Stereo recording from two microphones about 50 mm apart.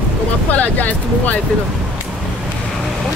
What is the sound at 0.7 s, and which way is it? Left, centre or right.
Speech, left.